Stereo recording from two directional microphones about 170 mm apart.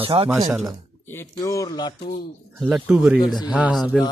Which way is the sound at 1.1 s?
15° left (ahead or behind).